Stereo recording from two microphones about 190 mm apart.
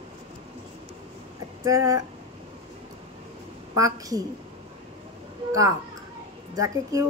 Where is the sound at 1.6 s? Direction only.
15° right (ahead or behind).